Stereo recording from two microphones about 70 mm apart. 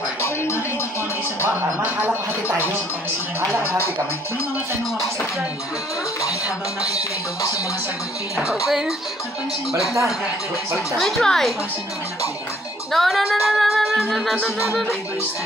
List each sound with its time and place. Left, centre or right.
1.5 s speech: right
8.6 s speech: centre
11.0 s speech: centre
12.9 s speech: centre